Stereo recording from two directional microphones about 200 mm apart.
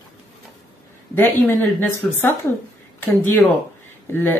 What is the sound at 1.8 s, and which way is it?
Speech, 10° left (ahead or behind).